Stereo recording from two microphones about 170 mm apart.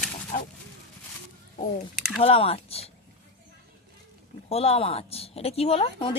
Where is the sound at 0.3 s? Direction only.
55° left (ahead or behind).